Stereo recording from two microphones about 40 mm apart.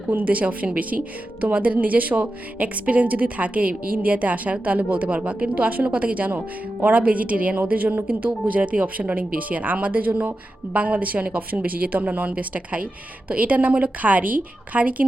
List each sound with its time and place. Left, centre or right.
0.1 s speech: right